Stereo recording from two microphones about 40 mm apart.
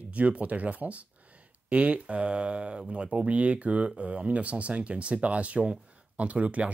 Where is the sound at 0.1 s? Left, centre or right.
Right.